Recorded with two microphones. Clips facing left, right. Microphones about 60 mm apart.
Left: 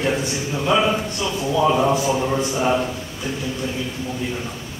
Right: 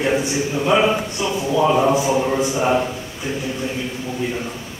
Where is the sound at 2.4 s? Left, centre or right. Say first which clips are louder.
Right 2 dB; right.